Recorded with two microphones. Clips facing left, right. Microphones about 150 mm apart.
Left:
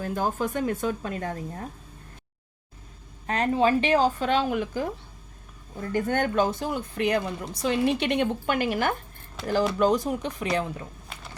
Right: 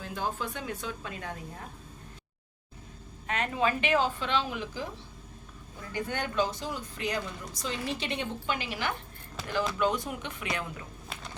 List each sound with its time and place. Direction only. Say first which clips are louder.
0.0 s speech: left 7 dB; 45° left (ahead or behind)
3.2 s speech: left 7 dB; 35° left (ahead or behind); by 4.9 s 50° left (ahead or behind)
5.9 s speech: left 8 dB; 50° left (ahead or behind)
9.7 s speech: left 7 dB; 40° left (ahead or behind)